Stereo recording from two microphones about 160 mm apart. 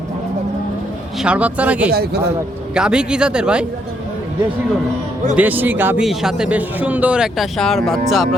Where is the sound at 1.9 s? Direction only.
80° right.